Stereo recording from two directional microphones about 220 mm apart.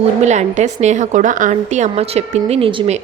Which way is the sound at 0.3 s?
30° right (ahead or behind).